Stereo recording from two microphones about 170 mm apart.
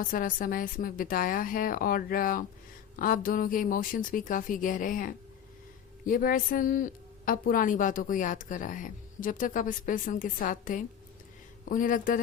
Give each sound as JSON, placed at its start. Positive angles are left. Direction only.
{"t": 0.0, "sound": "a woman's voice", "side_deg": 55}